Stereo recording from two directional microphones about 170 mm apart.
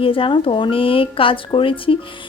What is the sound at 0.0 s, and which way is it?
Speech, 30° left (ahead or behind).